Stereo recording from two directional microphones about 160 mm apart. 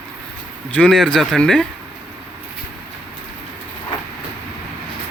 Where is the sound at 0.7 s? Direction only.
5° left (ahead or behind).